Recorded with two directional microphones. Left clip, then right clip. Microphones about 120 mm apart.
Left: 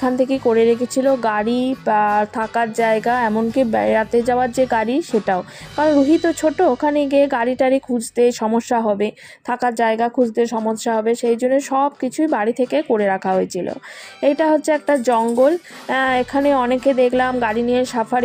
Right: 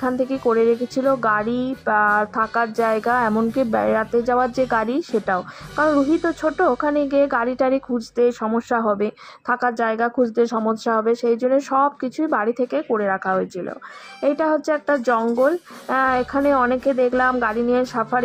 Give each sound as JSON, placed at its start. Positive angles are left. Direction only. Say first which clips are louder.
{"t": 0.0, "sound": "speech", "louder": "left 3 dB", "side_deg": 25}
{"t": 1.8, "sound": "speech", "louder": "left 1 dB", "side_deg": 35}
{"t": 5.2, "sound": "speech", "louder": "left 2 dB", "side_deg": 35}
{"t": 8.2, "sound": "speech", "louder": "left 3 dB", "side_deg": 30}
{"t": 8.8, "sound": "speech", "louder": "left 2 dB", "side_deg": 15}
{"t": 10.2, "sound": "a woman's voice", "louder": "left 1 dB", "side_deg": 10}
{"t": 12.9, "sound": "speech", "louder": "left 3 dB", "side_deg": 35}
{"t": 14.2, "sound": "speech", "louder": "left 4 dB", "side_deg": 25}